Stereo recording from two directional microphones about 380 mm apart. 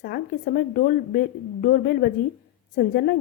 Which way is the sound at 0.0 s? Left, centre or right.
Left.